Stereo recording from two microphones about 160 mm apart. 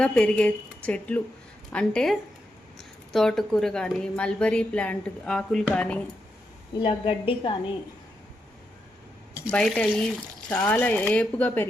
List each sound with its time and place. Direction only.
0.0 s a woman's voice: 5° left (ahead or behind)
6.7 s a woman's voice: 35° left (ahead or behind)
9.5 s a woman's voice: 5° left (ahead or behind)